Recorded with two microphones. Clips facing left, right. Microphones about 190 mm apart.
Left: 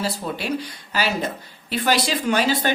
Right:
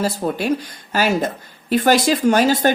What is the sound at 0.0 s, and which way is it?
A woman's voice, 45° right (ahead or behind).